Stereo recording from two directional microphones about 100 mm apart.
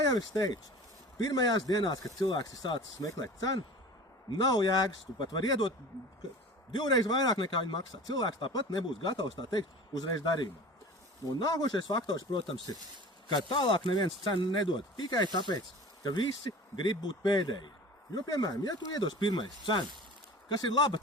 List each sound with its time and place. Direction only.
0.0 s speech: 40° left (ahead or behind)
6.7 s speech: 45° left (ahead or behind)